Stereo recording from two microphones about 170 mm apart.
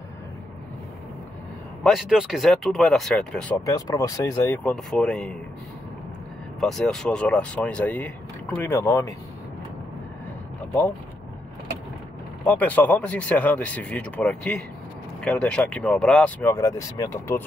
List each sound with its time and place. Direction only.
1.8 s speech: centre (ahead or behind)
3.6 s speech: 20° left (ahead or behind)
4.6 s speech: 5° left (ahead or behind)
6.6 s speech: 5° left (ahead or behind)
12.4 s speech: 10° left (ahead or behind)